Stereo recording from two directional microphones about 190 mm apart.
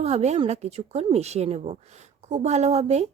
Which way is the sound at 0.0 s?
35° right (ahead or behind).